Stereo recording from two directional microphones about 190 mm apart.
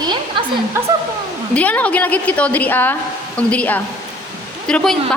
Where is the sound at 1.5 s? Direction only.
10° left (ahead or behind).